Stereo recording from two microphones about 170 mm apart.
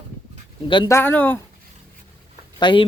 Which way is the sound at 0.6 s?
30° left (ahead or behind).